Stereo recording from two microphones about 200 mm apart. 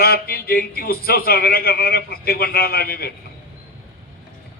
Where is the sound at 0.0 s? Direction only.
50° left (ahead or behind).